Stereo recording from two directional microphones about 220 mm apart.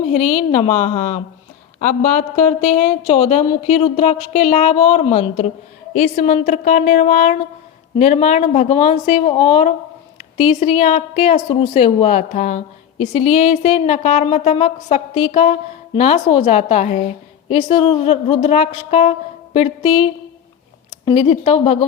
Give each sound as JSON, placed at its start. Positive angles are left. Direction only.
{"t": 0.2, "sound": "a woman's voice", "side_deg": 0}
{"t": 0.5, "sound": "a woman's voice", "side_deg": 30}